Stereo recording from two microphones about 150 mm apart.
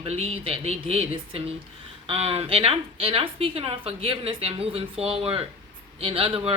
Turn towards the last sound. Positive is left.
turn(degrees=-40)  # may be behind; listen again after turning